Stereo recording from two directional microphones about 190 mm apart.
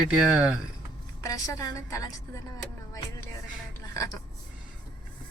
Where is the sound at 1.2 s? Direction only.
15° left (ahead or behind).